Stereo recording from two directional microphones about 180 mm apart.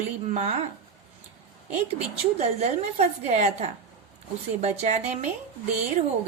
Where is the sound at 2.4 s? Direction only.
35° right (ahead or behind).